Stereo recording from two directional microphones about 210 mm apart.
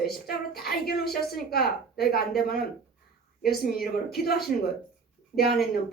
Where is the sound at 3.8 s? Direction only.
Centre (ahead or behind).